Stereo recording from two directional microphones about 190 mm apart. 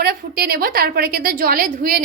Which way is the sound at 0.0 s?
55° right (ahead or behind).